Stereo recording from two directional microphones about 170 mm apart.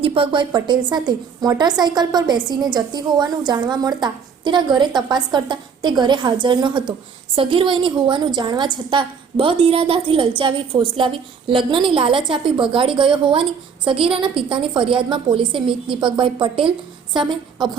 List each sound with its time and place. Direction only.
0.0 s a woman's voice: 30° right (ahead or behind)